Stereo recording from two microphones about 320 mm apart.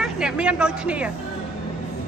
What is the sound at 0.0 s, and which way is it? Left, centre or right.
Speech, centre.